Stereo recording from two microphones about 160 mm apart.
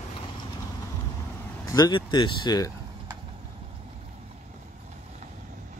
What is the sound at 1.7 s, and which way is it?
Speech, 25° left (ahead or behind).